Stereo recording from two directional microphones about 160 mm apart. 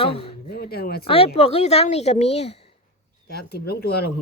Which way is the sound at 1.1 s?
35° left (ahead or behind).